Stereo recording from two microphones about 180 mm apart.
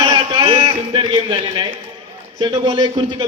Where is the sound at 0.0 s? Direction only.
25° right (ahead or behind).